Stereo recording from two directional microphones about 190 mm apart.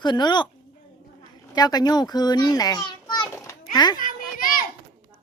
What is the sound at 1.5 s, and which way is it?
A child's voice, 20° left (ahead or behind).